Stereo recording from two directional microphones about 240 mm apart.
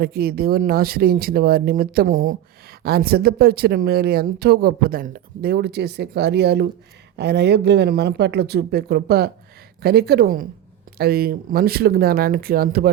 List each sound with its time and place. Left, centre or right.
0.0 s speech: right